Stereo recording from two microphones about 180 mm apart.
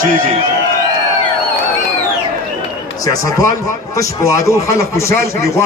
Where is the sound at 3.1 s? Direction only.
20° left (ahead or behind).